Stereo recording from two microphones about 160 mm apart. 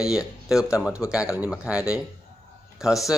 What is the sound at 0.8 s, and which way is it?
Speech, 5° right (ahead or behind).